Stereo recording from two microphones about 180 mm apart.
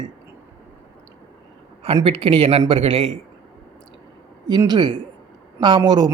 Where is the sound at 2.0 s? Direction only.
30° right (ahead or behind).